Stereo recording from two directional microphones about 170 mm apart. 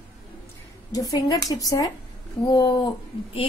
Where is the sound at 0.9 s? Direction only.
20° left (ahead or behind).